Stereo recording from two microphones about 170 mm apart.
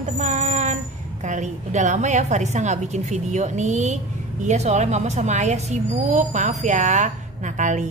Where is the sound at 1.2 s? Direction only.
45° right (ahead or behind).